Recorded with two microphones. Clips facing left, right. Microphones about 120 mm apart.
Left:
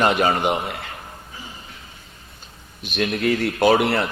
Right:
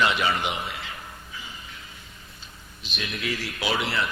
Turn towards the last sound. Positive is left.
turn(degrees=55)  # may be behind; listen again after turning